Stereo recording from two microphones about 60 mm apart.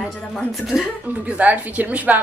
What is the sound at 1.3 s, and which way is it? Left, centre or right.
Speech, right.